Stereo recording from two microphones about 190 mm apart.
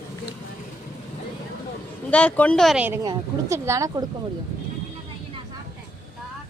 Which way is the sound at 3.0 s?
20° right (ahead or behind).